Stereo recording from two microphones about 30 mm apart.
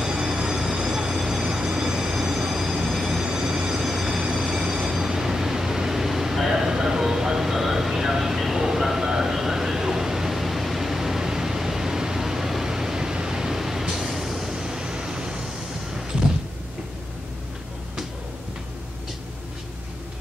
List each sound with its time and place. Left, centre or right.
0.0 s train: right
1.1 s train: centre
3.3 s train: right
3.8 s vehicle: centre
4.3 s train: centre
8.8 s a sound: centre
14.0 s vehicle: centre; by 15.5 s right